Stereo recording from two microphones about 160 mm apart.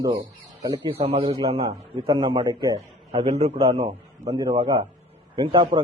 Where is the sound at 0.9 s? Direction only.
40° right (ahead or behind); by 2.8 s 20° right (ahead or behind).